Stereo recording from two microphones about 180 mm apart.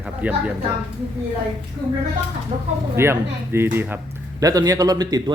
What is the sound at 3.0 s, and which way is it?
Speech, 15° right (ahead or behind).